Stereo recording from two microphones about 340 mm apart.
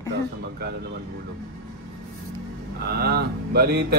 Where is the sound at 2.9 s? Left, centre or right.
Right.